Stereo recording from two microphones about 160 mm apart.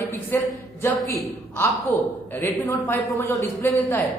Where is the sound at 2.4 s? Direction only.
15° left (ahead or behind).